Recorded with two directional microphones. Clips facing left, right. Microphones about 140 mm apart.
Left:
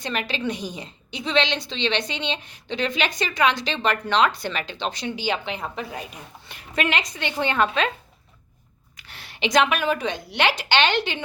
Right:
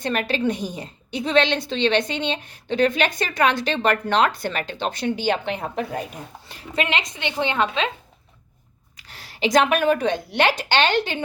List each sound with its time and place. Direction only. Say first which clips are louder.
0.0 s a woman's voice: right 5 dB; 50° right (ahead or behind)
6.5 s speech: even; 30° right (ahead or behind)
9.0 s a woman's voice: right 3 dB; 35° right (ahead or behind)